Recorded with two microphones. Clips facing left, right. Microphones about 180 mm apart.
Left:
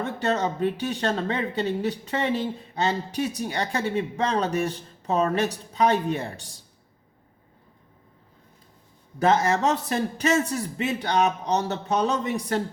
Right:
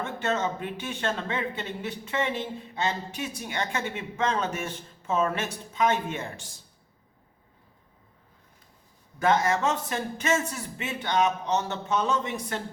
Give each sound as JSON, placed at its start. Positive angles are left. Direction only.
{"t": 0.0, "sound": "speech", "side_deg": 35}
{"t": 9.1, "sound": "speech", "side_deg": 35}